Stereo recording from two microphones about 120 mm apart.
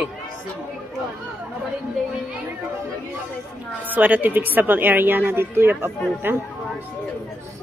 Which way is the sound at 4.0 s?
15° right (ahead or behind).